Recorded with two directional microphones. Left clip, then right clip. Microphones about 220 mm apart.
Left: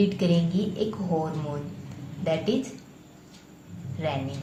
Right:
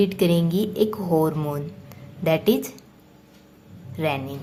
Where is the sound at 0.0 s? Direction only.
40° right (ahead or behind).